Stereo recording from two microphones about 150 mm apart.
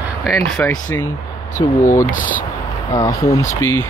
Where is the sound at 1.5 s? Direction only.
60° left (ahead or behind).